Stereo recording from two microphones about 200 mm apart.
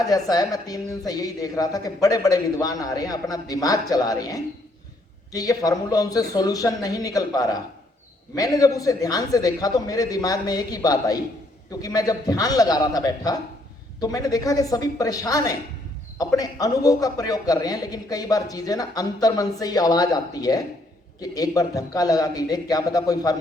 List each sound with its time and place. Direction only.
0.0 s a woman's voice: 20° left (ahead or behind)